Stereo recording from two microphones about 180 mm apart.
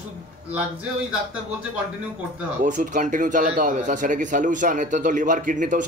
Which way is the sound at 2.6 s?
45° right (ahead or behind).